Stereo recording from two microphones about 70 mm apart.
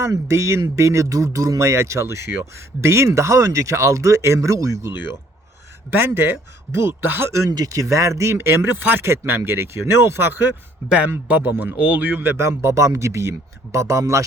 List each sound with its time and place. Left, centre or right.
0.0 s speech: right
5.9 s a man's voice: right
7.5 s a man's voice: right
10.8 s a man's voice: centre; by 14.3 s right